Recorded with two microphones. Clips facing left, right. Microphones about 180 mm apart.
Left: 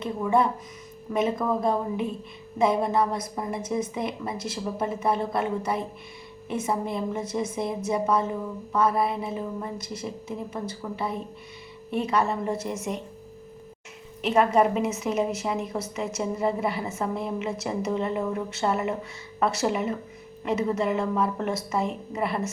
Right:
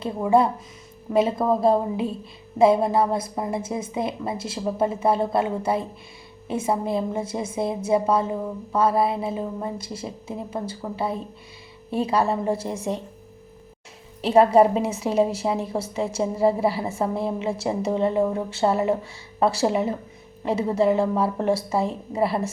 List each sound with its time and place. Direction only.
0.0 s a woman's voice: 30° right (ahead or behind)
14.2 s a woman's voice: 35° right (ahead or behind)